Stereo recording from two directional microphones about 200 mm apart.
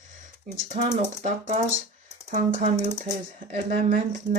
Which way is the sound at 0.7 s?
35° right (ahead or behind).